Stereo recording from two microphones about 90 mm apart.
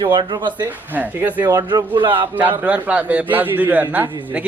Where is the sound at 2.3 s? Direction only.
20° right (ahead or behind).